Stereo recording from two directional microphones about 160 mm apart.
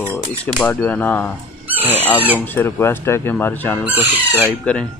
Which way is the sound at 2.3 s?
15° left (ahead or behind).